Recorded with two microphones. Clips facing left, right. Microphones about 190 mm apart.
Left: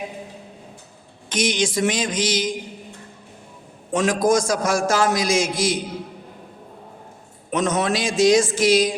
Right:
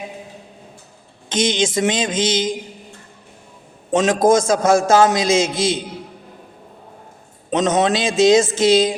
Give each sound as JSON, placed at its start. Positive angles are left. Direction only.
{"t": 1.3, "sound": "a man's voice", "side_deg": -25}
{"t": 3.9, "sound": "a man's voice", "side_deg": -25}
{"t": 7.5, "sound": "a man's voice", "side_deg": -20}